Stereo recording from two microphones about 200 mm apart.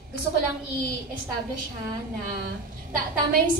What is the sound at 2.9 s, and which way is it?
Speech, 45° right (ahead or behind).